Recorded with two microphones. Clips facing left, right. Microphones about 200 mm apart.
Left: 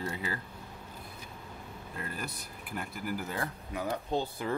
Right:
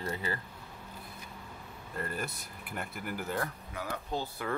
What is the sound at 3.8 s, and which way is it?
Speech, 20° left (ahead or behind).